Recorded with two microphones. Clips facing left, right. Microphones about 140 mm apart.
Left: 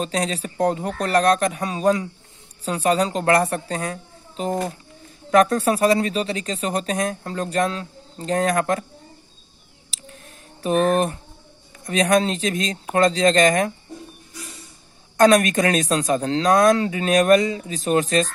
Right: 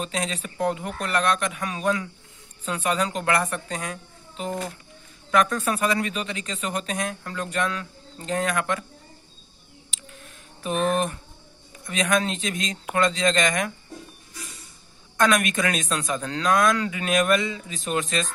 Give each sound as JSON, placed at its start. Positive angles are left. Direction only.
{"t": 0.0, "sound": "speech", "side_deg": 35}
{"t": 9.8, "sound": "a sound", "side_deg": 35}
{"t": 11.8, "sound": "speech", "side_deg": 35}
{"t": 15.1, "sound": "speech", "side_deg": 35}